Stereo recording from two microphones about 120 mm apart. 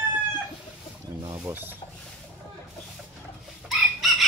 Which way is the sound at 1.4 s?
15° right (ahead or behind).